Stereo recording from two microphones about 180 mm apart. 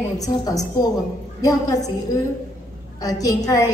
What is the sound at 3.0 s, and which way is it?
Speech, 20° left (ahead or behind).